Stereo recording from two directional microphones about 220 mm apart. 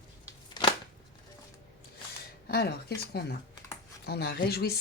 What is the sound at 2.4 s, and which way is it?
Speech, 45° left (ahead or behind).